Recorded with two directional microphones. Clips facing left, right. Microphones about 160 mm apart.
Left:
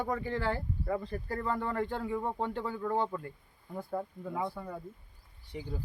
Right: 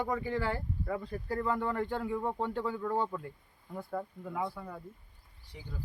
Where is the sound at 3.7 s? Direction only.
10° left (ahead or behind).